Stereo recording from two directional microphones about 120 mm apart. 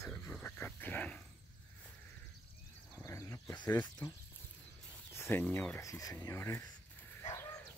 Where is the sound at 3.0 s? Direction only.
25° left (ahead or behind).